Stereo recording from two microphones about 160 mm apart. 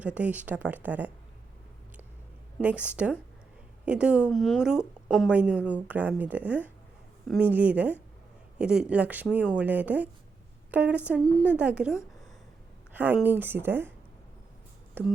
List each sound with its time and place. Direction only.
0.0 s a woman's voice: 10° right (ahead or behind)
2.6 s a woman's voice: 10° right (ahead or behind)
11.2 s a woman's voice: 5° left (ahead or behind)
11.4 s a woman's voice: 10° right (ahead or behind)
12.9 s a sound: 10° right (ahead or behind)
13.2 s a woman's voice: 10° right (ahead or behind)
15.0 s a woman's voice: 10° right (ahead or behind)